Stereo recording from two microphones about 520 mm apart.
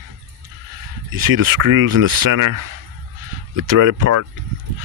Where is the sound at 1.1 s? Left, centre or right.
Right.